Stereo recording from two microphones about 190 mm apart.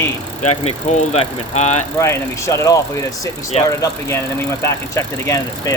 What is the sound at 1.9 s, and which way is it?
Speech, 15° left (ahead or behind).